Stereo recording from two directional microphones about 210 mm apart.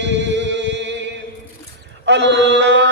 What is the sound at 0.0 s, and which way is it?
Music, 55° right (ahead or behind).